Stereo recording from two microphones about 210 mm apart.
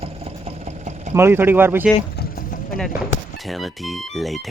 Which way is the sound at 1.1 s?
10° right (ahead or behind).